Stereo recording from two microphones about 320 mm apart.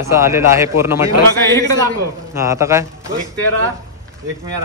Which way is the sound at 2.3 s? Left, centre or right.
Centre.